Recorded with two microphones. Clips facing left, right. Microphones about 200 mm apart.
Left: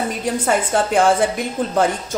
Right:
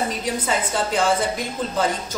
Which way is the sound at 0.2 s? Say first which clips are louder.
Left 5 dB; 55° left (ahead or behind).